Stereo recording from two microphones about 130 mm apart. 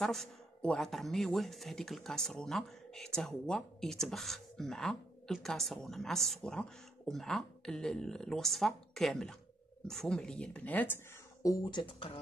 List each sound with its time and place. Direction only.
0.0 s speech: 5° left (ahead or behind)
11.4 s speech: 30° left (ahead or behind)
11.8 s speech: 45° left (ahead or behind)